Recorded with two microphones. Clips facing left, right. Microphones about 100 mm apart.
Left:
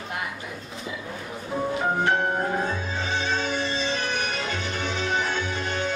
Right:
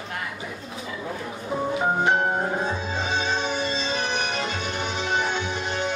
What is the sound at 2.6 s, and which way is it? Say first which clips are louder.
Music: right 1 dB; 20° right (ahead or behind).